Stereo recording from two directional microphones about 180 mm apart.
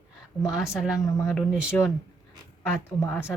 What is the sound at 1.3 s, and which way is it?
Speech, 5° right (ahead or behind).